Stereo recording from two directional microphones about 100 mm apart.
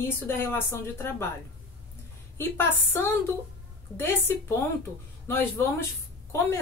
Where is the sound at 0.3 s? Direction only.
25° left (ahead or behind).